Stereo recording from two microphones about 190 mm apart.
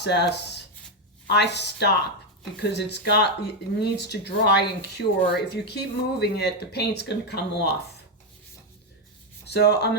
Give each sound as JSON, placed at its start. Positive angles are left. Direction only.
{"t": 0.0, "sound": "speech", "side_deg": 60}
{"t": 9.5, "sound": "speech", "side_deg": 60}